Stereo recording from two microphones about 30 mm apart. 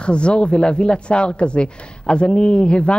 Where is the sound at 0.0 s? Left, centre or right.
Left.